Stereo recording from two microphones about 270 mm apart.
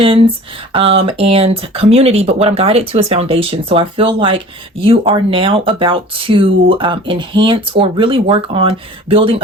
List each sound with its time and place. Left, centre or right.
0.0 s speech: centre